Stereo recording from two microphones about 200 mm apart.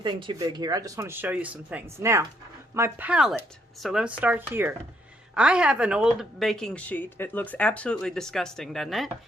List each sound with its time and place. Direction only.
0.0 s a woman's voice: 25° right (ahead or behind); by 9.0 s centre (ahead or behind)